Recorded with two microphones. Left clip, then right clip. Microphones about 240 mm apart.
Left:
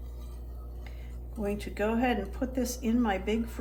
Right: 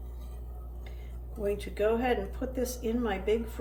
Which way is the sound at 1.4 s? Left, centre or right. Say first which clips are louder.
Right 3 dB; centre.